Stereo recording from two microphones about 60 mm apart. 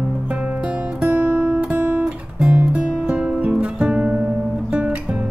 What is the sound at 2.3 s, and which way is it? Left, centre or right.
Music, centre.